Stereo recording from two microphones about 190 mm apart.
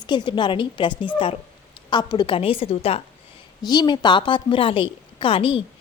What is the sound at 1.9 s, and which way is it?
A woman's voice, 25° left (ahead or behind).